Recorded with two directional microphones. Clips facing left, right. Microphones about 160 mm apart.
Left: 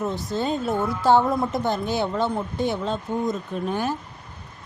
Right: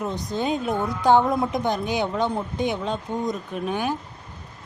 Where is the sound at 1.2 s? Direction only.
Centre (ahead or behind).